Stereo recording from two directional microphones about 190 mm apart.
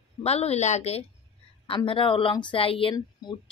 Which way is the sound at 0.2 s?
35° left (ahead or behind).